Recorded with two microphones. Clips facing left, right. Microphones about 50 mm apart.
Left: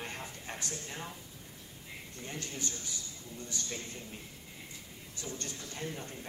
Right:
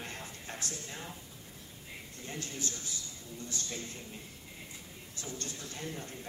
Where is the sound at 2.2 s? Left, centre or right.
Left.